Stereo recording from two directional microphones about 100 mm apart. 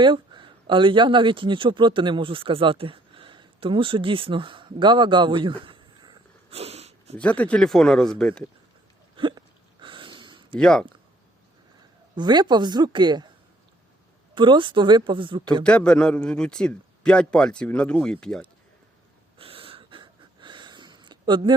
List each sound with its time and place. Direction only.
0.0 s speech: 55° right (ahead or behind)
6.5 s a sound: 90° right
7.2 s a man's voice: 15° left (ahead or behind)
9.1 s hiccup: 55° right (ahead or behind)
9.8 s a sound: 55° right (ahead or behind)
10.6 s a man's voice: 5° left (ahead or behind)
12.1 s a woman's voice: 45° right (ahead or behind)
14.3 s a woman's voice: 55° right (ahead or behind)
15.6 s a man's voice: 10° left (ahead or behind)
19.4 s wheeze: 65° right (ahead or behind); by 21.5 s 50° right (ahead or behind)